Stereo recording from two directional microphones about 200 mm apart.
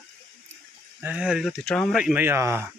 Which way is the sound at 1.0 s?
5° right (ahead or behind).